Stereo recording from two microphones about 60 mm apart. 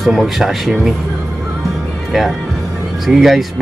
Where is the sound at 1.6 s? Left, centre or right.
Centre.